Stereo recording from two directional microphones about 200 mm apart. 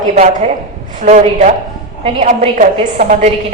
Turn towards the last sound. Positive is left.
turn(degrees=-35)  # may be behind; listen again after turning